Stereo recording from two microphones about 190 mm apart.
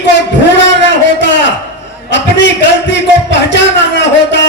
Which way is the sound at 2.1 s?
70° left (ahead or behind).